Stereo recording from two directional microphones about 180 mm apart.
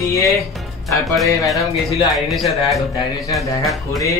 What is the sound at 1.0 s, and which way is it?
Speech, centre (ahead or behind).